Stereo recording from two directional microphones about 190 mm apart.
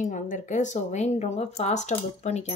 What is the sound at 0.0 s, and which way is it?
A woman's voice, 40° left (ahead or behind).